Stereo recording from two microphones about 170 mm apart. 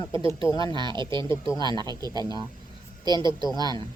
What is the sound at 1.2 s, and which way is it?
Speech, 15° left (ahead or behind).